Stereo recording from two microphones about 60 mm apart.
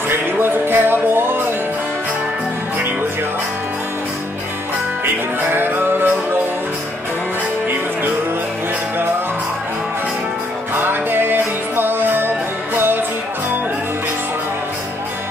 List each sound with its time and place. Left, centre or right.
0.1 s music: right
5.0 s music: right
10.7 s music: right